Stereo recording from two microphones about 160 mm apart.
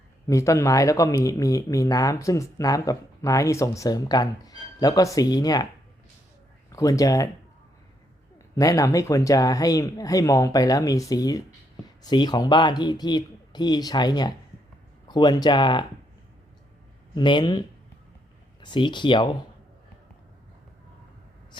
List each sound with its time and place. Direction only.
0.3 s speech: 20° left (ahead or behind)
6.7 s speech: 20° left (ahead or behind)
8.5 s speech: 20° left (ahead or behind)
17.2 s speech: 30° left (ahead or behind)
18.6 s speech: 30° left (ahead or behind)